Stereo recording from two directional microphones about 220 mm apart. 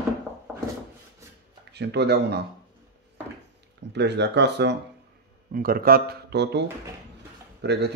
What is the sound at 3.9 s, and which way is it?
Speech, 50° right (ahead or behind).